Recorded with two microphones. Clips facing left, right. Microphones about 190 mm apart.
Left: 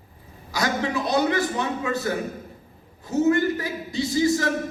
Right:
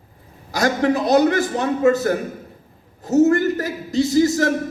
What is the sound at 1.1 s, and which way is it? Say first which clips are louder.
A man's voice: right 4 dB; 45° right (ahead or behind).